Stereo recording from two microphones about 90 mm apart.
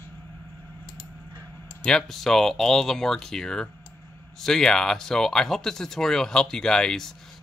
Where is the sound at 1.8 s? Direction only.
10° left (ahead or behind).